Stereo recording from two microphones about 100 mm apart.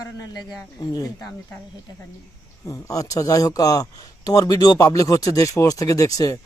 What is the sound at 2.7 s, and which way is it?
Speech, 35° left (ahead or behind).